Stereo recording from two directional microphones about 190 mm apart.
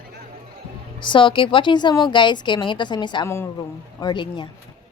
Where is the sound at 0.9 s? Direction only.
25° left (ahead or behind).